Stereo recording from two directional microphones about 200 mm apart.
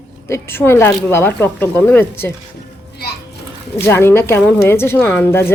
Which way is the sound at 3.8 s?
10° left (ahead or behind).